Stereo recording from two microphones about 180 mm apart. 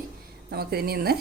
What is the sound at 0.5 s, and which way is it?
Speech, 60° right (ahead or behind).